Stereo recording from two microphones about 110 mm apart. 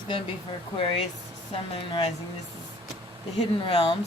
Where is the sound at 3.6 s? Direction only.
50° left (ahead or behind).